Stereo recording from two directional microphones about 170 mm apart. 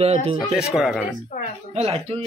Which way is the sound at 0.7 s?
Centre (ahead or behind).